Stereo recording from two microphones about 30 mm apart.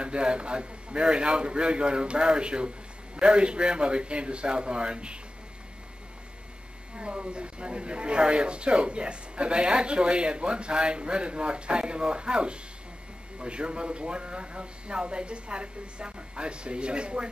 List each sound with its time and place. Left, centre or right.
0.0 s speech: right
7.0 s speech: right